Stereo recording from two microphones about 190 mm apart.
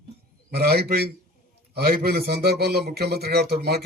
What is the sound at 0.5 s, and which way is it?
A man's voice, 55° right (ahead or behind).